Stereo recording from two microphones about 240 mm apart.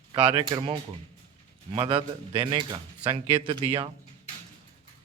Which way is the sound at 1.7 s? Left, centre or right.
Right.